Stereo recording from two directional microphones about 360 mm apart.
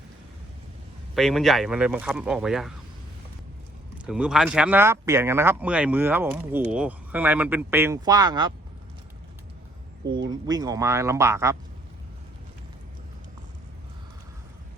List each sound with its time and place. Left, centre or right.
1.1 s speech: centre
4.0 s speech: centre
10.2 s speech: centre